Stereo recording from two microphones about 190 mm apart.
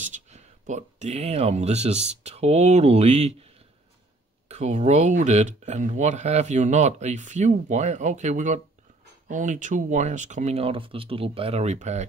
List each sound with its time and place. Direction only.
0.0 s speech: 40° right (ahead or behind)